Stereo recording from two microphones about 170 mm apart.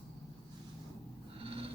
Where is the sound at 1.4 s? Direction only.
35° right (ahead or behind).